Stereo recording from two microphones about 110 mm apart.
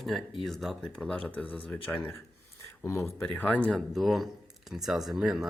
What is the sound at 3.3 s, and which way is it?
Speech, 15° left (ahead or behind).